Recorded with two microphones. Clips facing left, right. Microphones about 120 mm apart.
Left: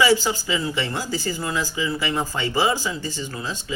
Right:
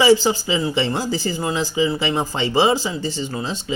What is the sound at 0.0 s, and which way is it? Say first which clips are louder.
Speech: right 4 dB; 25° right (ahead or behind).